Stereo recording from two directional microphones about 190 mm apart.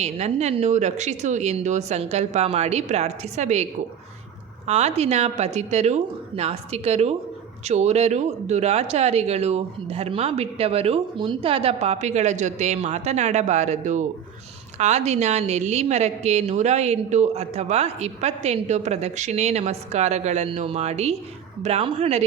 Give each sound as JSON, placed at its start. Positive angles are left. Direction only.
{"t": 0.0, "sound": "a woman's voice", "side_deg": -35}